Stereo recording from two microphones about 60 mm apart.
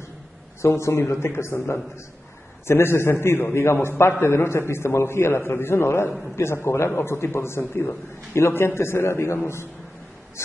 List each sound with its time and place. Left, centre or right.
0.6 s a man's voice: left
1.2 s a man's voice: left